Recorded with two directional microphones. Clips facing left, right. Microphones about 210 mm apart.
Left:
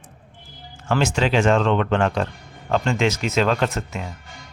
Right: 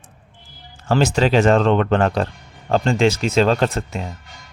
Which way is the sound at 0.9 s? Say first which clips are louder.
Right 4 dB; 35° right (ahead or behind).